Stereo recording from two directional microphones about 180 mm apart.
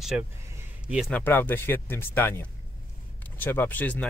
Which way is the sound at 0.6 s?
5° right (ahead or behind).